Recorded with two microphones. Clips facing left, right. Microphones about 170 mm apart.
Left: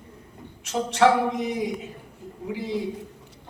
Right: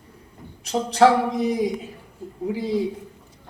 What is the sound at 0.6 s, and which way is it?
A man's voice, 35° right (ahead or behind).